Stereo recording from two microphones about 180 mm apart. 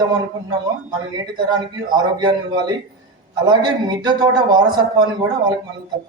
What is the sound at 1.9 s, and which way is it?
A man's voice, 25° right (ahead or behind).